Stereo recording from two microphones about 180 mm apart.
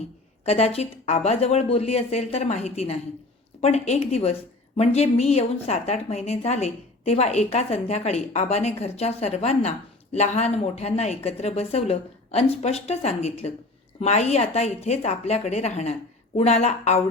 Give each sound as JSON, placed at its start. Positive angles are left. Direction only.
{"t": 0.4, "sound": "a woman's voice", "side_deg": 35}